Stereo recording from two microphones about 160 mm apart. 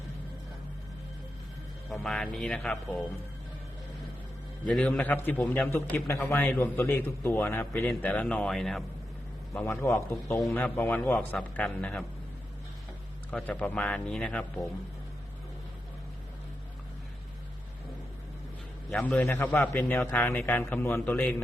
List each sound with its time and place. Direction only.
1.9 s a man's voice: 5° left (ahead or behind)
4.6 s a man's voice: 10° left (ahead or behind)
9.6 s a man's voice: 15° left (ahead or behind)
10.3 s a man's voice: 5° left (ahead or behind)
13.3 s a man's voice: 5° left (ahead or behind)
18.9 s a man's voice: 10° left (ahead or behind)